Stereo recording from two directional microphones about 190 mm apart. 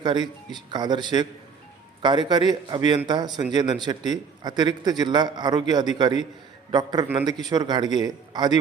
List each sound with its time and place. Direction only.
0.0 s a man's voice: 20° right (ahead or behind)